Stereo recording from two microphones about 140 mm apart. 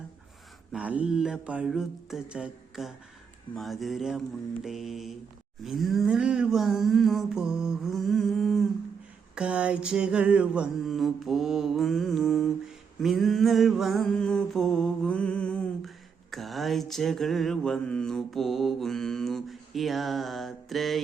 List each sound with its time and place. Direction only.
0.7 s mantra: 10° right (ahead or behind)